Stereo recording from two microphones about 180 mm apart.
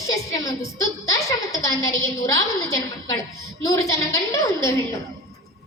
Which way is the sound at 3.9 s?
15° left (ahead or behind).